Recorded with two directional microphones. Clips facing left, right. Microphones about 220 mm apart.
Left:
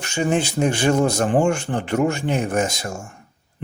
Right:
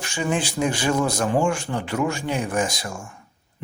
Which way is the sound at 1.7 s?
50° left (ahead or behind).